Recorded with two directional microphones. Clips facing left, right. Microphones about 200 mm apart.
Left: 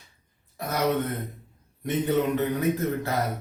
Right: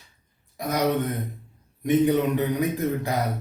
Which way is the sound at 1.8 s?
15° right (ahead or behind).